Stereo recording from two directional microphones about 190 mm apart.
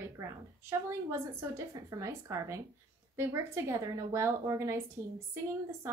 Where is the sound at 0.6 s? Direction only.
15° right (ahead or behind).